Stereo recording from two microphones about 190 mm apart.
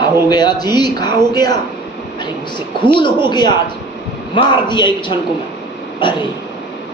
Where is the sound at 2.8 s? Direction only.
25° left (ahead or behind).